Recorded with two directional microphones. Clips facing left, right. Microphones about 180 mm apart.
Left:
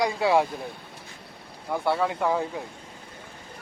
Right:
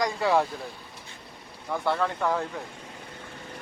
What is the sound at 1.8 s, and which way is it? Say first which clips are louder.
Speech: left 2 dB; 10° left (ahead or behind).